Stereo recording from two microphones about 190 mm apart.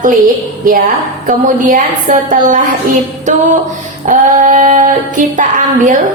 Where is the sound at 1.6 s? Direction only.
45° right (ahead or behind).